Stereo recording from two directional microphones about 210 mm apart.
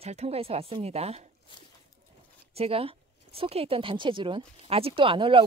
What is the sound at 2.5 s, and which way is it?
Speech, 30° right (ahead or behind).